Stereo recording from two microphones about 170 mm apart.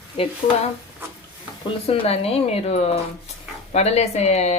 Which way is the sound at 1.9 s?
35° left (ahead or behind).